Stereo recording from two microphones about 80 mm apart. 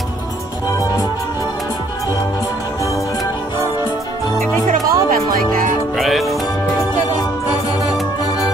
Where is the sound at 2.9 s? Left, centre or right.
Left.